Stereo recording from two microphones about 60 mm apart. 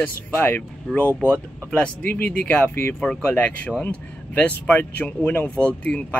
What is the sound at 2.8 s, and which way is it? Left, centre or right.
Speech, left.